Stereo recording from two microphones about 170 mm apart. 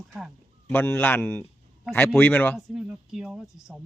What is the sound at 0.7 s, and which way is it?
A man's voice, 10° left (ahead or behind).